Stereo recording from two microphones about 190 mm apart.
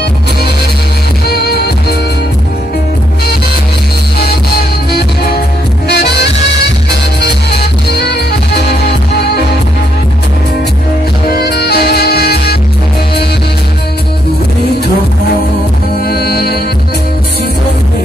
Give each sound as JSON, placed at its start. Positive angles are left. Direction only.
{"t": 5.9, "sound": "music", "side_deg": 60}
{"t": 8.0, "sound": "music", "side_deg": 60}
{"t": 11.3, "sound": "music", "side_deg": 55}
{"t": 16.0, "sound": "music", "side_deg": 55}